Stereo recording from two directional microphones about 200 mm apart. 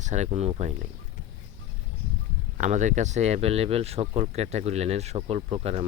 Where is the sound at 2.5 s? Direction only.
40° right (ahead or behind).